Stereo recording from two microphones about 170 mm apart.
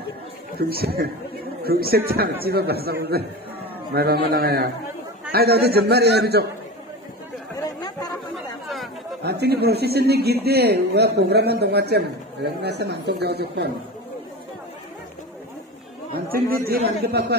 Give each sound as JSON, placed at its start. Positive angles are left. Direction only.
{"t": 0.6, "sound": "a man's voice", "side_deg": -65}
{"t": 9.2, "sound": "speech", "side_deg": -75}
{"t": 16.3, "sound": "a man's voice", "side_deg": -60}